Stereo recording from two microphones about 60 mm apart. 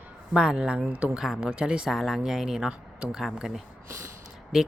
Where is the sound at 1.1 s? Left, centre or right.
Centre.